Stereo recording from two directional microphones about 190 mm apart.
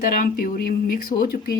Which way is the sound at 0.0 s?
50° left (ahead or behind).